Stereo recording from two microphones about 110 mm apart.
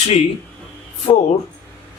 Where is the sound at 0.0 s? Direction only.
90° left.